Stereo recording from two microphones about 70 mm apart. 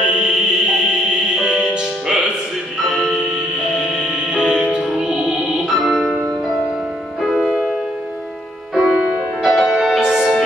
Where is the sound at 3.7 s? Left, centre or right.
Centre.